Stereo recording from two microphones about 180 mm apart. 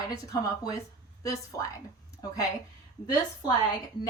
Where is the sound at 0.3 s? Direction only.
20° left (ahead or behind).